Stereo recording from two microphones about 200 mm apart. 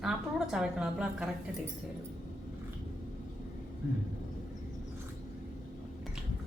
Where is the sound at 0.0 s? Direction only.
Centre (ahead or behind).